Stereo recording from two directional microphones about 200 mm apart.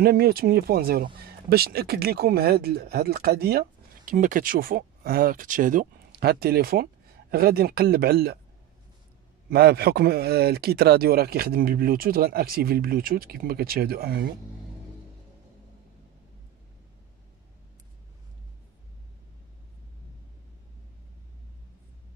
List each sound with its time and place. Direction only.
0.0 s speech: 50° right (ahead or behind)
9.5 s speech: 50° right (ahead or behind)